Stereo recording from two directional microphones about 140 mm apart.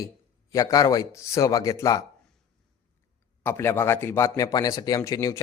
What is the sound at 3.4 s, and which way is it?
Speech, 20° left (ahead or behind).